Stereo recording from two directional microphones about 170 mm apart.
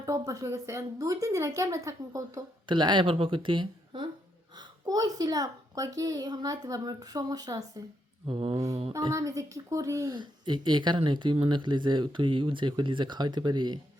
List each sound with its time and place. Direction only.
0.0 s a woman's voice: 20° right (ahead or behind)
8.3 s mantra: 35° right (ahead or behind)
8.9 s a woman's voice: 20° right (ahead or behind)